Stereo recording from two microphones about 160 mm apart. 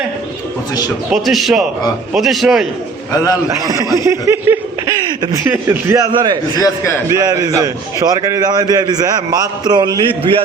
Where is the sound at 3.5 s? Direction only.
20° right (ahead or behind).